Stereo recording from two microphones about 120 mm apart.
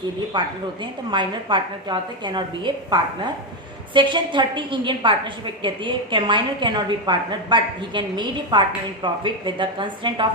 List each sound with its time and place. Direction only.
0.3 s a woman's voice: 40° right (ahead or behind)